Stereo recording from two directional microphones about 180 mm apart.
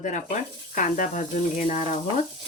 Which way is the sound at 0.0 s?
45° left (ahead or behind).